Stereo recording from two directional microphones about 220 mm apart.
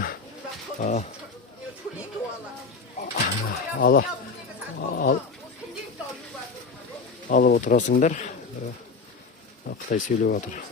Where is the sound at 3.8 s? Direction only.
40° left (ahead or behind).